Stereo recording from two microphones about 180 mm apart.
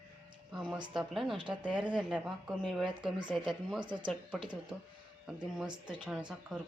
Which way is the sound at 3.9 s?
25° right (ahead or behind).